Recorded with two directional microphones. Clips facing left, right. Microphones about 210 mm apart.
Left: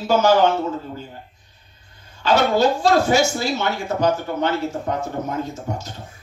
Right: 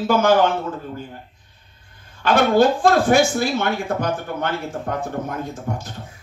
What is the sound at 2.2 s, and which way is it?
Speech, 55° right (ahead or behind).